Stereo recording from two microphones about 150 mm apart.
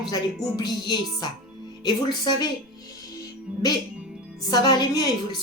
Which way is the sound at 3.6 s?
25° left (ahead or behind).